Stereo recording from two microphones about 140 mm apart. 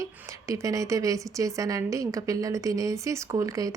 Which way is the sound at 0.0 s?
25° right (ahead or behind).